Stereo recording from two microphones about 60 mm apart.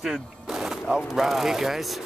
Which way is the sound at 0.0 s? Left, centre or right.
Centre.